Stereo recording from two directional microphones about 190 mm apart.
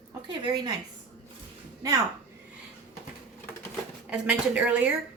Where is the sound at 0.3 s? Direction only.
20° right (ahead or behind).